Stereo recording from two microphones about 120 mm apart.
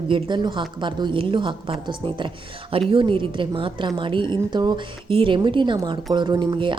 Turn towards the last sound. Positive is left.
turn(degrees=-40)  # may be behind; listen again after turning